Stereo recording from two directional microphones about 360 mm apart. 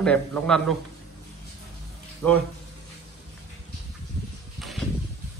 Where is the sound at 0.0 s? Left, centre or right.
Centre.